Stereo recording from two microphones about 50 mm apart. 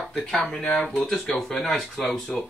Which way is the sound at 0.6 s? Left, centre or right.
Left.